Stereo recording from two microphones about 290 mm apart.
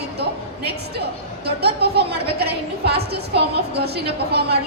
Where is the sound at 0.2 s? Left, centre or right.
Right.